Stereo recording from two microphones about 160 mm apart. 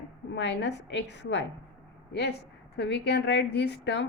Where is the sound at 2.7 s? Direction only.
90° left.